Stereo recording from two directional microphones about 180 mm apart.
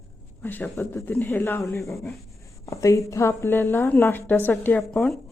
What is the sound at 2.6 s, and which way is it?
A woman's voice, 15° left (ahead or behind).